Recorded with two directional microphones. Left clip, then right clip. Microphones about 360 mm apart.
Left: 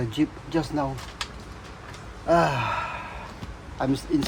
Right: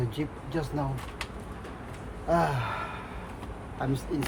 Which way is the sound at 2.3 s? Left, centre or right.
Left.